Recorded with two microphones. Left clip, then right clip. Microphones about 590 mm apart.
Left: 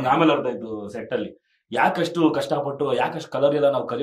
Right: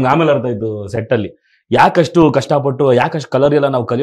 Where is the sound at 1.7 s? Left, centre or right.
Right.